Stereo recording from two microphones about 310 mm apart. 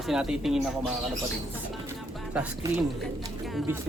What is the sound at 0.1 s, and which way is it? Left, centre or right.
Speech, centre.